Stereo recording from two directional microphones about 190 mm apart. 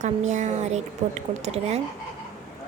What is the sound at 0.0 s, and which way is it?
Speech, 40° right (ahead or behind).